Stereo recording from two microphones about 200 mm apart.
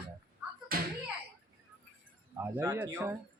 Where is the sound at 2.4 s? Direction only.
10° right (ahead or behind).